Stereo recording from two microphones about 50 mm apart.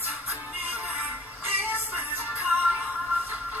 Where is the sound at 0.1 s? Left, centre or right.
Right.